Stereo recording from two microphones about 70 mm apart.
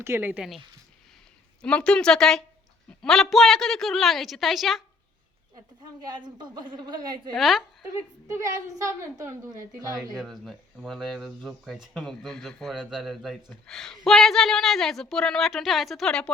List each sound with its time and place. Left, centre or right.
0.0 s speech: right
1.6 s a woman's voice: centre
6.1 s a woman's voice: right
7.3 s speech: centre
8.3 s a woman's voice: right
10.2 s speech: centre